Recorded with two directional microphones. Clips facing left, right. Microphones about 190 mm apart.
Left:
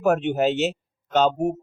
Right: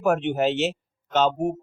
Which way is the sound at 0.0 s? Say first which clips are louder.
Left 1 dB; 40° left (ahead or behind).